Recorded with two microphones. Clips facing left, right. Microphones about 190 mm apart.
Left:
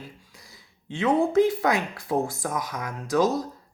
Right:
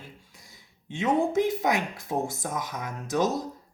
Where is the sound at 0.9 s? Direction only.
20° right (ahead or behind).